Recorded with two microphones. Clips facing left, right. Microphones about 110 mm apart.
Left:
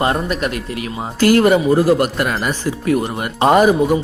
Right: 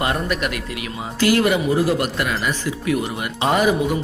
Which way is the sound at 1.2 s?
45° left (ahead or behind).